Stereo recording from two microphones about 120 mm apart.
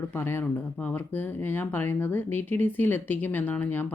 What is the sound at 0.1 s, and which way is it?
Speech, 20° left (ahead or behind).